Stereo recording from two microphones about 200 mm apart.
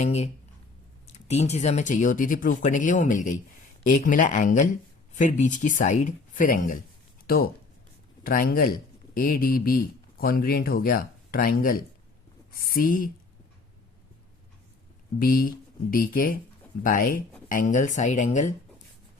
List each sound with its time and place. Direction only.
0.0 s speech: 35° left (ahead or behind)
15.2 s speech: 45° left (ahead or behind)